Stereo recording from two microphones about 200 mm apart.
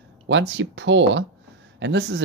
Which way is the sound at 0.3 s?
65° right (ahead or behind).